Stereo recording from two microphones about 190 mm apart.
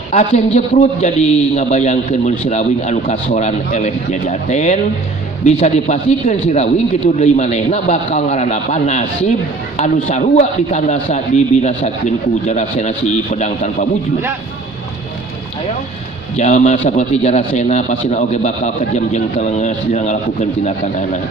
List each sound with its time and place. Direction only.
0.1 s a man's voice: 35° left (ahead or behind)
16.4 s a man's voice: 40° left (ahead or behind)